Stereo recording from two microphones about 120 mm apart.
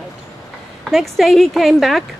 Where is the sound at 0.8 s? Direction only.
Centre (ahead or behind).